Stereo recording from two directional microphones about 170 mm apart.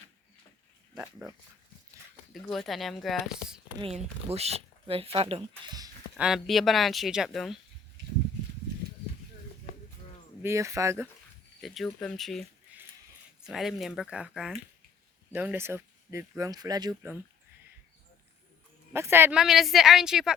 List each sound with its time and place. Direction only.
2.3 s speech: centre (ahead or behind)
3.8 s speech: 35° right (ahead or behind)
6.1 s speech: 5° right (ahead or behind)
10.4 s speech: 15° right (ahead or behind)
11.6 s speech: centre (ahead or behind); by 16.9 s 25° right (ahead or behind)
18.9 s speech: 15° right (ahead or behind)